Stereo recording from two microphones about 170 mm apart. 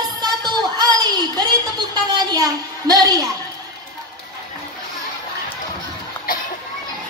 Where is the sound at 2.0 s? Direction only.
20° right (ahead or behind).